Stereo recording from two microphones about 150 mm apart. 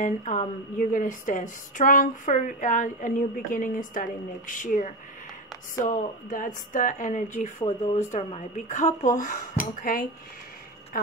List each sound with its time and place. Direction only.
0.0 s a woman's voice: 60° left (ahead or behind)